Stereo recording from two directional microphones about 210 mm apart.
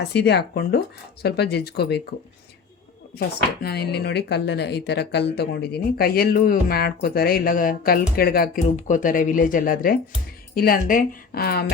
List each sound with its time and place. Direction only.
0.1 s speech: 55° left (ahead or behind)
3.2 s speech: 50° left (ahead or behind)